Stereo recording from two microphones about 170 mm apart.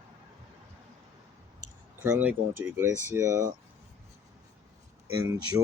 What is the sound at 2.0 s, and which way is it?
Speech, 10° right (ahead or behind).